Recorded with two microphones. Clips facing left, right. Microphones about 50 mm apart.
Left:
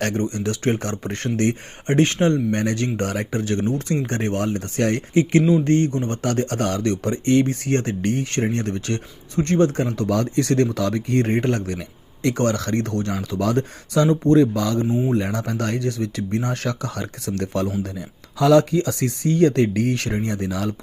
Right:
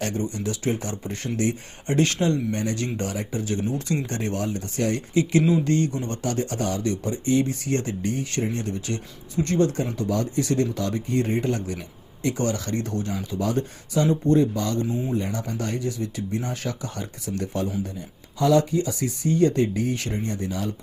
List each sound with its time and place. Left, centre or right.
0.0 s speech: left
1.9 s speech: left
2.6 s speech: left
5.4 s speech: centre
5.6 s speech: left
9.8 s speech: left
18.3 s speech: left